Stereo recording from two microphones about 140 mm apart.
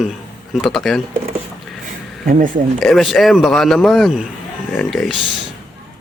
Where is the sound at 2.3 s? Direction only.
70° right (ahead or behind).